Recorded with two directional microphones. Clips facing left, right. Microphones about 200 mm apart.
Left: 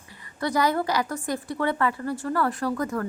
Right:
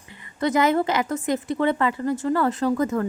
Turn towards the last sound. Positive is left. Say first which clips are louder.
# right 5 dB
turn(degrees=-20)  # may be behind; listen again after turning